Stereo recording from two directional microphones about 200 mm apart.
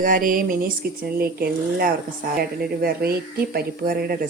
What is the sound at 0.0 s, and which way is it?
Speech, 45° right (ahead or behind).